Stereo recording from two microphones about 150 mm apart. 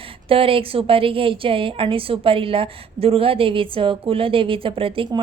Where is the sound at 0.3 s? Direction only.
35° right (ahead or behind).